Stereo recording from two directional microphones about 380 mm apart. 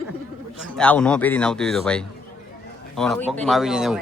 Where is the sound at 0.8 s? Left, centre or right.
Centre.